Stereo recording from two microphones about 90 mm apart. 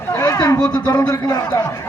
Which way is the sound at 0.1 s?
35° left (ahead or behind).